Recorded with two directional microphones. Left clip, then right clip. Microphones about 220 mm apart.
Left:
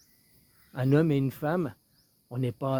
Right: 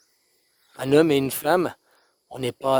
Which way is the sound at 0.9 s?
50° right (ahead or behind).